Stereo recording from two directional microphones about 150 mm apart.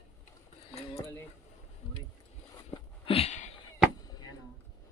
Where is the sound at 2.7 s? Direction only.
40° left (ahead or behind).